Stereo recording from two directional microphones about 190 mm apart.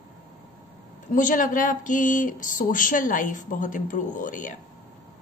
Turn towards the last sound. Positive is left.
turn(degrees=45)  # may be behind; listen again after turning